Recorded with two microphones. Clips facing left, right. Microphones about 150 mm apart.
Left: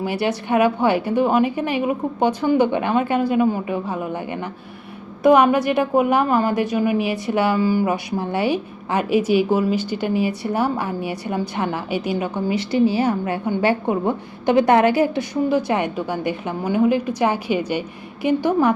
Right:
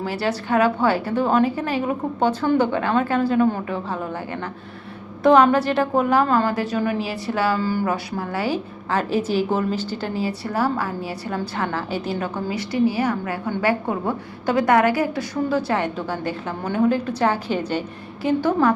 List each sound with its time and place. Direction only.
0.0 s a woman's voice: 15° left (ahead or behind)